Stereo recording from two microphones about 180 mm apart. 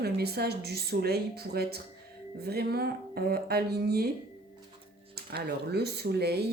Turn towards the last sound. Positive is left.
turn(degrees=-60)  # may be behind; listen again after turning